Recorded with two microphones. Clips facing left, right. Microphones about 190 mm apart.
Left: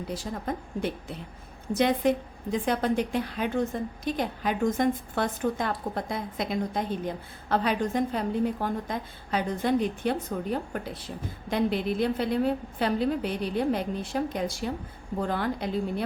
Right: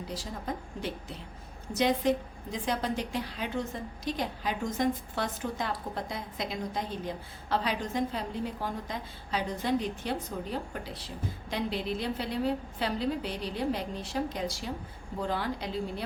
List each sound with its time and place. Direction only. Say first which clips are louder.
0.1 s a woman's voice: left 4 dB; 55° left (ahead or behind)